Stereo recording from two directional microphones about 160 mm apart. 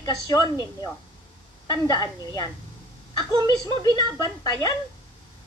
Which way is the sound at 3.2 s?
25° right (ahead or behind).